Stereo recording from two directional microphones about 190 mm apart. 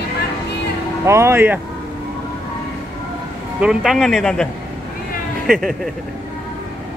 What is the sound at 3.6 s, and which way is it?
Speech, 5° right (ahead or behind).